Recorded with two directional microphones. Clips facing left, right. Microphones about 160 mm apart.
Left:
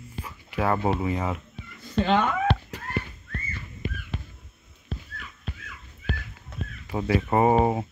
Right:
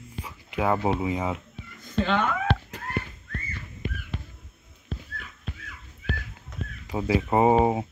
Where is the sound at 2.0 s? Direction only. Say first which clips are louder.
Left 3 dB; 35° left (ahead or behind).